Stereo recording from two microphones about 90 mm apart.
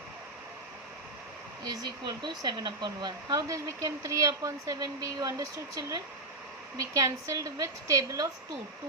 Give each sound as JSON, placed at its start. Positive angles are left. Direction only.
{"t": 1.6, "sound": "speech", "side_deg": -50}